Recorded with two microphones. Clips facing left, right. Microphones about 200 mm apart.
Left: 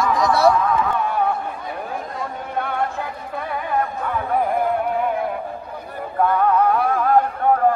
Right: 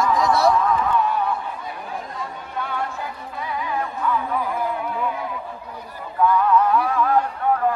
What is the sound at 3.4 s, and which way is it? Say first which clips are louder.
Music: left 3 dB; 55° left (ahead or behind).